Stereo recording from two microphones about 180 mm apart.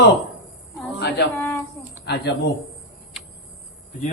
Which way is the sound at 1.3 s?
10° left (ahead or behind).